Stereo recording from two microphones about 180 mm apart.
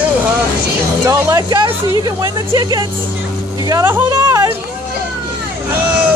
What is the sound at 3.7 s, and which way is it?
Speech, 15° right (ahead or behind).